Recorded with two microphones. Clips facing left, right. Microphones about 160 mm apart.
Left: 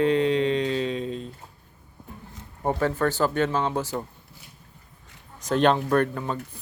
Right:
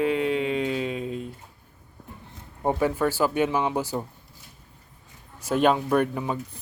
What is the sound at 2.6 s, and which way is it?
Speech, 15° right (ahead or behind).